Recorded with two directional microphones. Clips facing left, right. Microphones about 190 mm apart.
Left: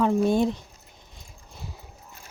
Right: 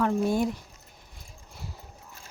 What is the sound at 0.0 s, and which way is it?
Speech, 20° left (ahead or behind).